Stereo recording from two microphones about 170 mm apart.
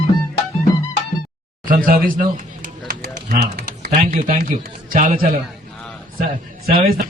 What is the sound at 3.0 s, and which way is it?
Typing, 65° right (ahead or behind).